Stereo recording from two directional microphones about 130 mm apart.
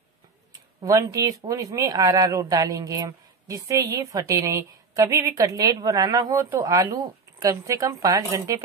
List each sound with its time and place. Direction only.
0.5 s speech: 25° right (ahead or behind)